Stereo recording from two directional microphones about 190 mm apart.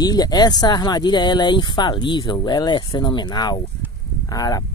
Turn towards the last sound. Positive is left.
turn(degrees=20)  # may be behind; listen again after turning